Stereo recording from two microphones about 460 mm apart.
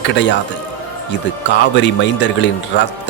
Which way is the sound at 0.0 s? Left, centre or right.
Left.